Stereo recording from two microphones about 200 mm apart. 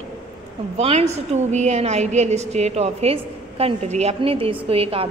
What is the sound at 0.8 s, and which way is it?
A woman's voice, 35° right (ahead or behind).